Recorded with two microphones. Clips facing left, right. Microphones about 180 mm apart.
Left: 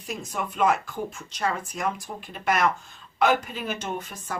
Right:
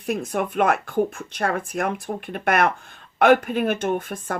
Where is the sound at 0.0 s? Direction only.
55° right (ahead or behind).